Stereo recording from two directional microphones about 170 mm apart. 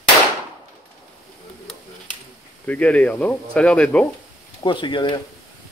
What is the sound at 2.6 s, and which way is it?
Speech, 10° left (ahead or behind).